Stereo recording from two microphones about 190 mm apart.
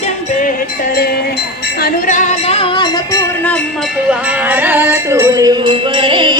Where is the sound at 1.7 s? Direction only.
50° left (ahead or behind); by 3.2 s 20° left (ahead or behind).